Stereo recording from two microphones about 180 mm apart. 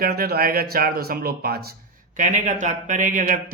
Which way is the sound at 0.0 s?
55° right (ahead or behind).